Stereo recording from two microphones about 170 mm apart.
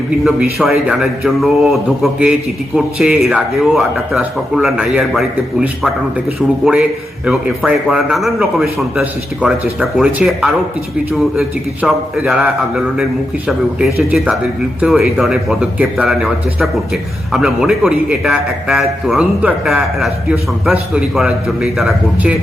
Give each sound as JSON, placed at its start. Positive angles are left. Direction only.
{"t": 0.3, "sound": "speech", "side_deg": -5}